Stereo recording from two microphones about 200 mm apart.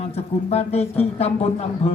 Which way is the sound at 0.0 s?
30° left (ahead or behind).